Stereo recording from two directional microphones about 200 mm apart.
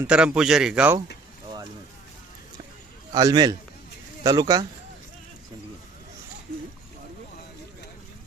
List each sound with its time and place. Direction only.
0.0 s speech: 5° right (ahead or behind)
3.1 s a man's voice: 20° right (ahead or behind)